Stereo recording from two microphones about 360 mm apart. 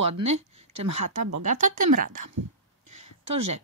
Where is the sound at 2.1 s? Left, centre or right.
Right.